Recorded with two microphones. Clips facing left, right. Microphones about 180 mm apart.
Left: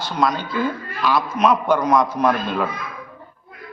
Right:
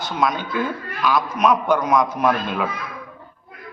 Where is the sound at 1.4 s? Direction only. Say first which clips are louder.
Left 1 dB; centre (ahead or behind).